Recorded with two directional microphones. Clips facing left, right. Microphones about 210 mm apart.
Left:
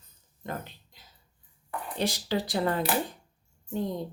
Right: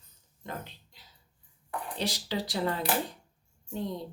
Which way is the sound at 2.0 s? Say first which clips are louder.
Left 5 dB; 50° left (ahead or behind).